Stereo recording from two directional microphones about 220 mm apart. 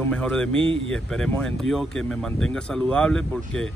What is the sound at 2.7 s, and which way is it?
Speech, 5° left (ahead or behind).